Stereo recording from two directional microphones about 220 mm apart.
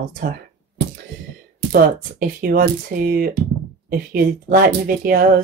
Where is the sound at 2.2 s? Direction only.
40° right (ahead or behind).